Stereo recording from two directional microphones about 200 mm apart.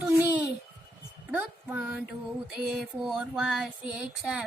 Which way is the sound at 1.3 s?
10° right (ahead or behind).